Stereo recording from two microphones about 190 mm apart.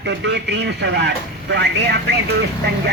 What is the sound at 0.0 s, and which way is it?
Speech, 65° right (ahead or behind).